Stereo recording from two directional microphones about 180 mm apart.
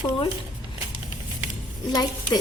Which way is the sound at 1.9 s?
20° left (ahead or behind).